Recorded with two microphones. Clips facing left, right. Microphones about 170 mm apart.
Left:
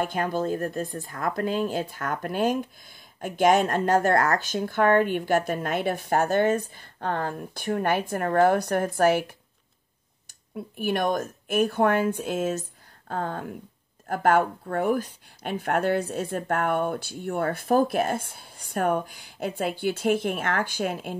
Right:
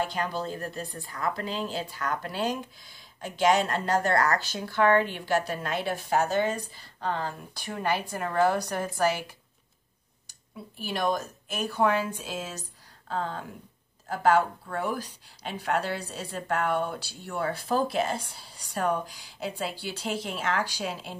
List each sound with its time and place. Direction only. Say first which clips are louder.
0.0 s speech: left 4 dB; 50° left (ahead or behind)
10.8 s speech: left 4 dB; 55° left (ahead or behind)